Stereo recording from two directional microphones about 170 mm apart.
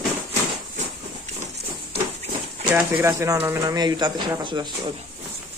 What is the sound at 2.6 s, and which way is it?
Speech, 10° right (ahead or behind).